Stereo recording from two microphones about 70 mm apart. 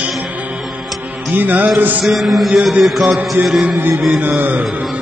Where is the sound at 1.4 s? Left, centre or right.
Right.